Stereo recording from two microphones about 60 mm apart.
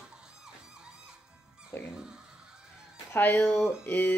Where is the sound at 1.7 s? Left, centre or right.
Left.